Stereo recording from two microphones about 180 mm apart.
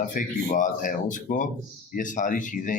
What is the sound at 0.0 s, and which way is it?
Speech, 45° left (ahead or behind).